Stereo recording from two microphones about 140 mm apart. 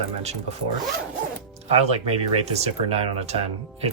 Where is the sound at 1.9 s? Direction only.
45° right (ahead or behind).